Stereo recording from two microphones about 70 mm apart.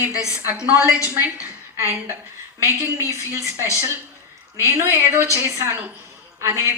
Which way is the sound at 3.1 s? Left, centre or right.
Right.